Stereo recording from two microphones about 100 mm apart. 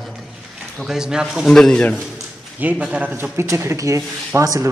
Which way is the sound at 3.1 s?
25° right (ahead or behind).